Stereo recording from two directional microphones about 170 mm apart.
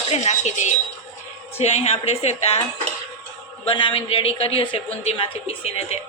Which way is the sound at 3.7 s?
30° left (ahead or behind).